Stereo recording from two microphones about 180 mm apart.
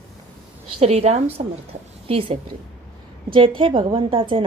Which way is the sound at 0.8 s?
35° right (ahead or behind).